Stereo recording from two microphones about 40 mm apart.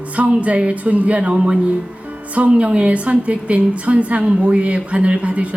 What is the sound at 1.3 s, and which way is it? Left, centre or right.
A woman's voice, right.